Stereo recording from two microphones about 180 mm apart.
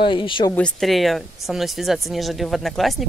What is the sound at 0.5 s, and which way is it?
Speech, 5° left (ahead or behind).